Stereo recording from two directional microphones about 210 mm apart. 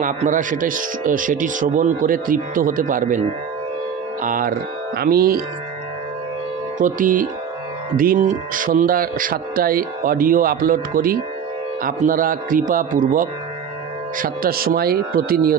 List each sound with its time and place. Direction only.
0.0 s speech: 40° right (ahead or behind)
6.8 s speech: 40° right (ahead or behind)